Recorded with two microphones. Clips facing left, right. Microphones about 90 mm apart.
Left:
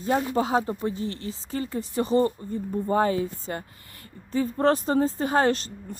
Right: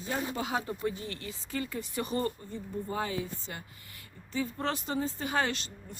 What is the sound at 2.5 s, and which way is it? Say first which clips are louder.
Speech: left 10 dB; 45° left (ahead or behind).